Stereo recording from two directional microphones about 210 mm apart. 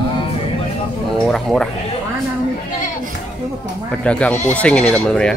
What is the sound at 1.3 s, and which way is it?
Speech, centre (ahead or behind).